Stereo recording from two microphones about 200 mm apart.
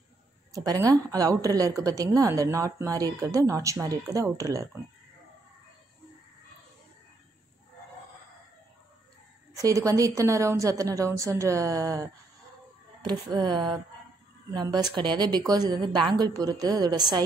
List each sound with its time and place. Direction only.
0.5 s a woman's voice: 15° right (ahead or behind)
9.6 s a woman's voice: 15° right (ahead or behind)
13.3 s speech: 20° right (ahead or behind)